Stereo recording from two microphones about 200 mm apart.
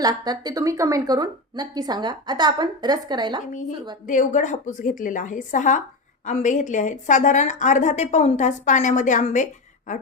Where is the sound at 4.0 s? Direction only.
40° left (ahead or behind).